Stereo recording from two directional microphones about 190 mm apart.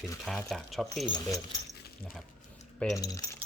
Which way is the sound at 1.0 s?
20° left (ahead or behind).